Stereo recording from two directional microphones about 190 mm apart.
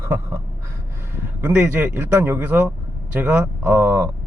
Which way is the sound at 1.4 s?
10° right (ahead or behind).